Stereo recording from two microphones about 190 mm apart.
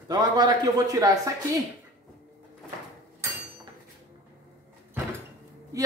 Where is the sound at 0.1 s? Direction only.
20° right (ahead or behind).